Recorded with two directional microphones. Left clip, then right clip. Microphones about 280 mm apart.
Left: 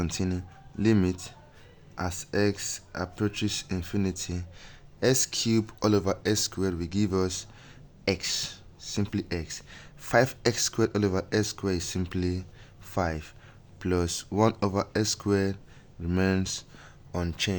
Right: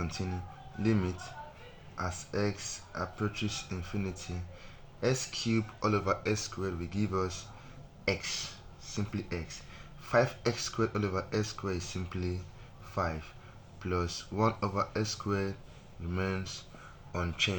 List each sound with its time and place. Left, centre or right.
0.8 s speech: left